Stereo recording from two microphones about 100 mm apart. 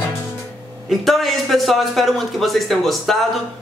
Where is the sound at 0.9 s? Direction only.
Centre (ahead or behind).